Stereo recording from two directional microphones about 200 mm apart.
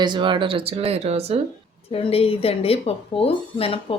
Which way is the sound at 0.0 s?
25° right (ahead or behind).